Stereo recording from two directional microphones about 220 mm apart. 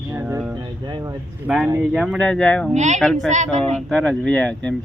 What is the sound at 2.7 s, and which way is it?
Speech, 30° right (ahead or behind).